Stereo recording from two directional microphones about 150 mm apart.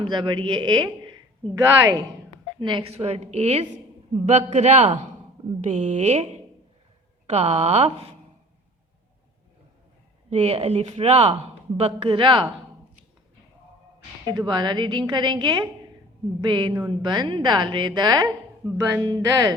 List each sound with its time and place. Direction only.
0.0 s a woman's voice: 30° right (ahead or behind)
10.2 s speech: 45° right (ahead or behind)
14.3 s speech: 30° right (ahead or behind)